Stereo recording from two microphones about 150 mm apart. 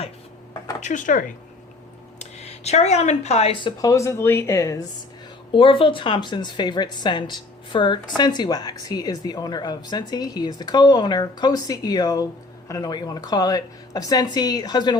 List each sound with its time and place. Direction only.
0.8 s speech: 55° left (ahead or behind)
2.1 s speech: 45° left (ahead or behind)
3.8 s speech: 20° left (ahead or behind)
5.5 s speech: 35° left (ahead or behind)